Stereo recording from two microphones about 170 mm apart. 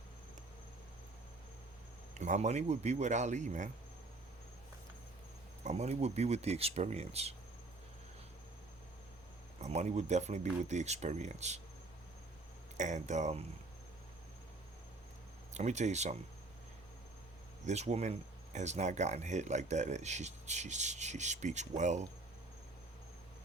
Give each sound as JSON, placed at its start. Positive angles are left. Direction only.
{"t": 2.1, "sound": "speech", "side_deg": -45}
{"t": 5.6, "sound": "speech", "side_deg": -40}
{"t": 9.6, "sound": "speech", "side_deg": -40}
{"t": 12.7, "sound": "speech", "side_deg": -45}
{"t": 15.5, "sound": "speech", "side_deg": -45}
{"t": 17.7, "sound": "speech", "side_deg": -40}